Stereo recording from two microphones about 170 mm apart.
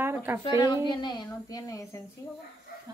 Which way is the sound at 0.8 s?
25° left (ahead or behind).